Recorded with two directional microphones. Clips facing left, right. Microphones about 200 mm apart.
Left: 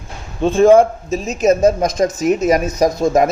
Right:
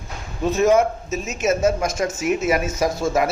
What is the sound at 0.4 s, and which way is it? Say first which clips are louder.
A man's voice: left 7 dB; 30° left (ahead or behind).